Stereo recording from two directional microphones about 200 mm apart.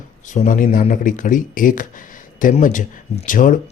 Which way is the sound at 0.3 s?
40° left (ahead or behind).